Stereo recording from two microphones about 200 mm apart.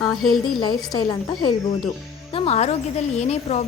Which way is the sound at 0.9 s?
20° left (ahead or behind).